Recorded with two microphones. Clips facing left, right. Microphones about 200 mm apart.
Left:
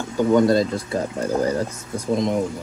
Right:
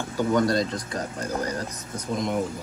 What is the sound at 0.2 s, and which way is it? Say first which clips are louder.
Speech: left 6 dB; 20° left (ahead or behind).